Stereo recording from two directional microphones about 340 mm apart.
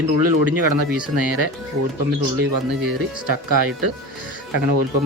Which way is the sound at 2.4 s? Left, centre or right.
Right.